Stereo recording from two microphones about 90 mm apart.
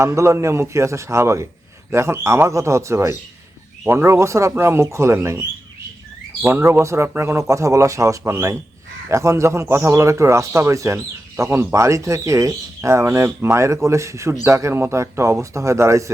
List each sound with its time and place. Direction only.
0.0 s a man's voice: 35° right (ahead or behind)